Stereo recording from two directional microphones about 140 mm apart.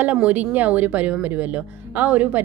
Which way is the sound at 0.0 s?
10° right (ahead or behind).